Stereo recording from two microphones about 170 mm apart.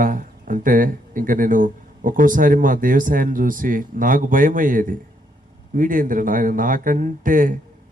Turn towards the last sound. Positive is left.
turn(degrees=-50)  # may be behind; listen again after turning